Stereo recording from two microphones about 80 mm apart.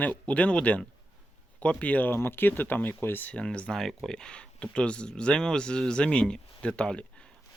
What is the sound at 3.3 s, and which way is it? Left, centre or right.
Speech, centre.